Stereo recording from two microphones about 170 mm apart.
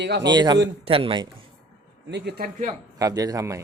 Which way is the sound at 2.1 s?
85° right.